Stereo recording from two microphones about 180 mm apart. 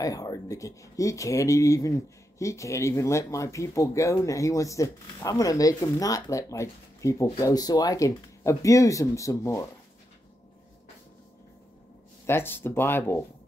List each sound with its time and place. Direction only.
0.0 s speech: 20° left (ahead or behind)
12.3 s speech: 10° left (ahead or behind)